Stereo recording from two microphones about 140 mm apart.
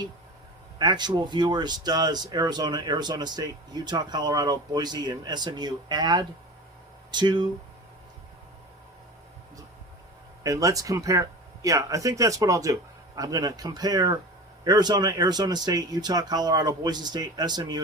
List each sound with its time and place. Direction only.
0.8 s speech: 30° right (ahead or behind)
10.4 s speech: 25° right (ahead or behind)